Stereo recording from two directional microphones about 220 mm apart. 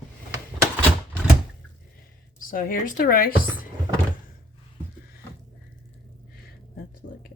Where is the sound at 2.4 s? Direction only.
40° left (ahead or behind).